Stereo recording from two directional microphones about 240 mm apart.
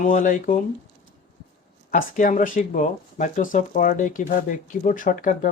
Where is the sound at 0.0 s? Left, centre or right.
Left.